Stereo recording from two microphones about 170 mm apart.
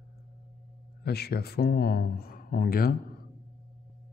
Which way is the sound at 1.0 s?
70° left (ahead or behind).